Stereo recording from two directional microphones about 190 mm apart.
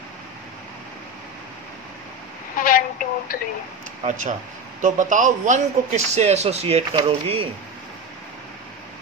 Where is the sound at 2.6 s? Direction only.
45° left (ahead or behind).